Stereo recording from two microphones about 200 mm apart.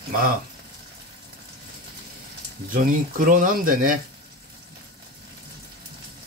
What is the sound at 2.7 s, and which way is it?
Speech, 45° right (ahead or behind).